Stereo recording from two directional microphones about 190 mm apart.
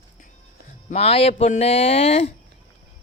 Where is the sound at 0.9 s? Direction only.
30° left (ahead or behind).